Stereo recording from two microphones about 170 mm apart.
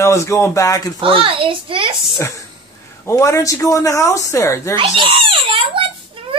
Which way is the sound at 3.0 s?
15° left (ahead or behind).